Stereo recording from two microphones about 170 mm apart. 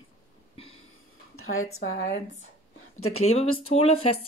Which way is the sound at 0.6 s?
35° left (ahead or behind).